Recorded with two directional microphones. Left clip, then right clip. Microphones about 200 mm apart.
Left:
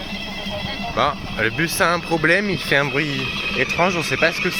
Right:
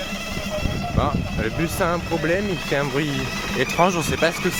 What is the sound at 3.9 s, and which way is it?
Speech, centre (ahead or behind).